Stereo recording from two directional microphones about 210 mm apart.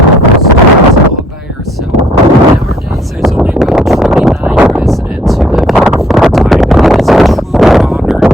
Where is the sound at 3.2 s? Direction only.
Centre (ahead or behind).